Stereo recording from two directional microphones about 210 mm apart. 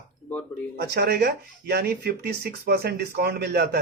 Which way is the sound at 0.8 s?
50° right (ahead or behind).